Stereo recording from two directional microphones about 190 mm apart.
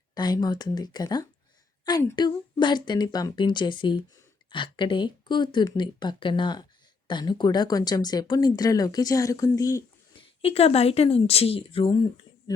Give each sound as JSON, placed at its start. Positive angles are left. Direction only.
{"t": 0.1, "sound": "a woman's voice", "side_deg": 20}
{"t": 10.4, "sound": "speech", "side_deg": 30}